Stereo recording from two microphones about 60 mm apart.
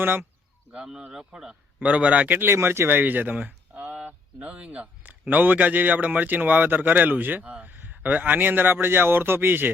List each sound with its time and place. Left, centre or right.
0.0 s a man's voice: right
0.7 s speech: centre
1.8 s speech: right
3.9 s a sound: right
5.0 s a man's voice: right